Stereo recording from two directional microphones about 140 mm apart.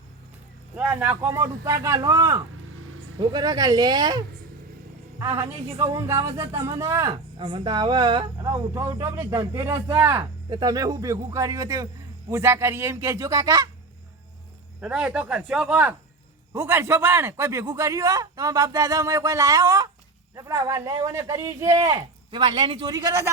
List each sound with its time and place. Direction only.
0.8 s a man's voice: 10° right (ahead or behind); by 4.2 s 30° right (ahead or behind)
5.8 s a man's voice: 20° right (ahead or behind)
7.1 s speech: 35° right (ahead or behind)
8.7 s a man's voice: 20° right (ahead or behind)
14.8 s a man's voice: 5° right (ahead or behind)